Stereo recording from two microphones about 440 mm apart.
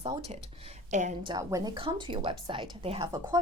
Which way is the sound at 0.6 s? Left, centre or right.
Centre.